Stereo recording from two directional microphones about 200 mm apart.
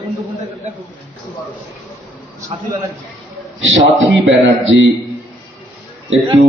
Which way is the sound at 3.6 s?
70° right (ahead or behind).